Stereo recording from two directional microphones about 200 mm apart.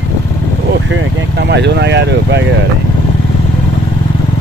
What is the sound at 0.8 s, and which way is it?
Vehicle, 65° right (ahead or behind).